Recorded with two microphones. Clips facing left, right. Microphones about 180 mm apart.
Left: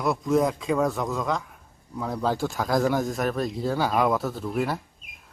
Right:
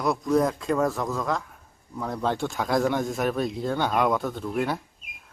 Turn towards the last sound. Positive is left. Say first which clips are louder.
# even
turn(degrees=0)  # may be behind; listen again after turning